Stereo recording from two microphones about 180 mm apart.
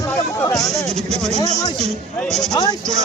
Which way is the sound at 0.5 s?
Centre (ahead or behind).